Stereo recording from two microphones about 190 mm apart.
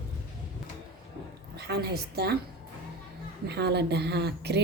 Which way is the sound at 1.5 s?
60° right (ahead or behind).